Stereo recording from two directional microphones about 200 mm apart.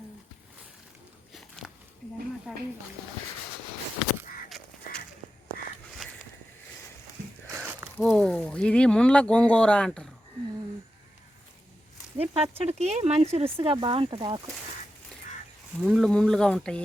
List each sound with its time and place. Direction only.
1.3 s biting: centre (ahead or behind)
2.5 s speech: centre (ahead or behind)
4.4 s a sound: centre (ahead or behind)
7.5 s crumpling: 10° right (ahead or behind)
7.9 s speech: 5° left (ahead or behind)
12.1 s speech: 30° right (ahead or behind)
15.8 s speech: centre (ahead or behind)